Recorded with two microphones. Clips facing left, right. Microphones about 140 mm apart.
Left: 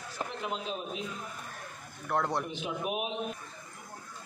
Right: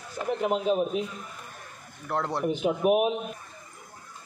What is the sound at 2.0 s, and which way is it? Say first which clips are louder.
Speech: right 1 dB; centre (ahead or behind).